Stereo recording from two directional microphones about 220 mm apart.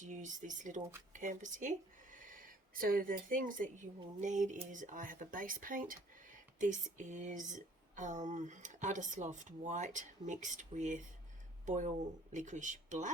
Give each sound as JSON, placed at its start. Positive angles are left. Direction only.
{"t": 0.0, "sound": "speech", "side_deg": -35}
{"t": 2.1, "sound": "a sound", "side_deg": -40}
{"t": 4.2, "sound": "speech", "side_deg": -35}